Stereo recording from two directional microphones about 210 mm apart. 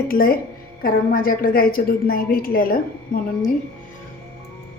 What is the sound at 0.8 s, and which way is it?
A woman's voice, 45° left (ahead or behind).